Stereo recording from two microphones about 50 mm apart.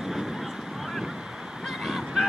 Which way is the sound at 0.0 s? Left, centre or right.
Centre.